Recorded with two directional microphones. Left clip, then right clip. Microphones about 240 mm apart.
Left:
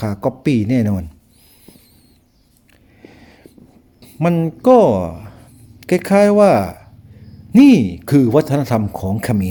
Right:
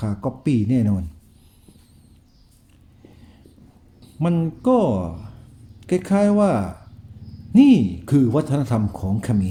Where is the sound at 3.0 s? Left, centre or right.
Left.